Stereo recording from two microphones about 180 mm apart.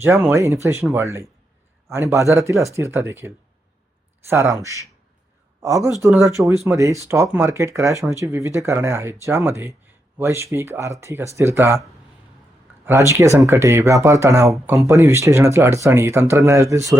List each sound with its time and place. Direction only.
0.0 s speech: 15° right (ahead or behind)
12.8 s speech: 15° right (ahead or behind)